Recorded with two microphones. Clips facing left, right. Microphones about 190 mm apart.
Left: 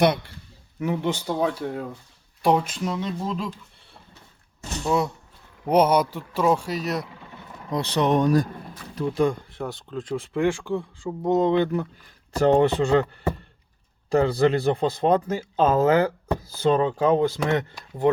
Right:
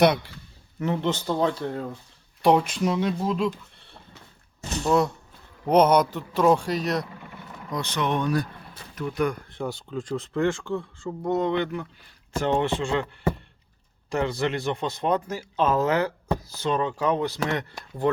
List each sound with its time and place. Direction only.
0.8 s speech: 10° left (ahead or behind); by 3.5 s 5° right (ahead or behind)
4.9 s speech: 5° left (ahead or behind)
7.7 s speech: 35° left (ahead or behind)
9.0 s speech: 30° left (ahead or behind)
9.5 s speech: centre (ahead or behind); by 13.1 s 40° left (ahead or behind)
14.1 s speech: 35° left (ahead or behind)